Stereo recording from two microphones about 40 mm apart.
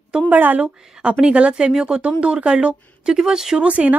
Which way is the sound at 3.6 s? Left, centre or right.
Right.